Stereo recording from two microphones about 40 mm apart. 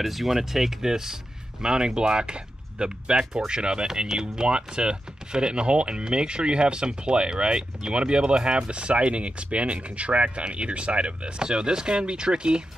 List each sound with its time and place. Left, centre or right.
0.0 s speech: centre; by 12.6 s right